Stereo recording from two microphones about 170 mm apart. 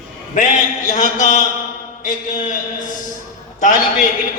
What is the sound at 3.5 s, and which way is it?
Speech, 45° left (ahead or behind).